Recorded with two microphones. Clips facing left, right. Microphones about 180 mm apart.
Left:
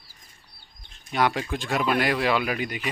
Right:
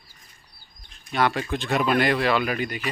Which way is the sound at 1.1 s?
10° left (ahead or behind).